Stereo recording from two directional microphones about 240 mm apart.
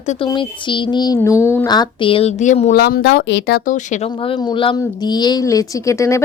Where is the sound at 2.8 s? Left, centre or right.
Left.